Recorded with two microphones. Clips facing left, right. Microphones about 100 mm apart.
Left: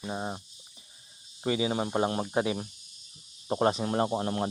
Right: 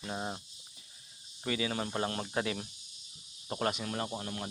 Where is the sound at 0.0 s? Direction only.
15° left (ahead or behind).